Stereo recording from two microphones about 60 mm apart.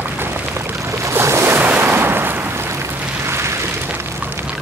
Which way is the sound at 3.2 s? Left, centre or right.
Right.